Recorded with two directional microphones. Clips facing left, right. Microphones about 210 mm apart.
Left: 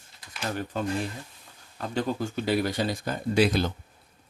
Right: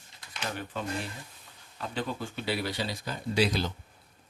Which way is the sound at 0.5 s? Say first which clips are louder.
Left 6 dB; 45° left (ahead or behind).